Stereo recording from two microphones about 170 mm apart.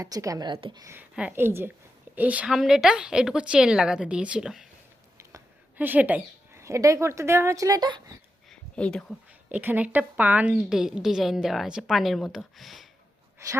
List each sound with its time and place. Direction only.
0.0 s a woman's voice: 20° right (ahead or behind)
8.4 s a sound: 5° left (ahead or behind)
9.5 s a woman's voice: 10° right (ahead or behind)
13.4 s a woman's voice: 20° right (ahead or behind)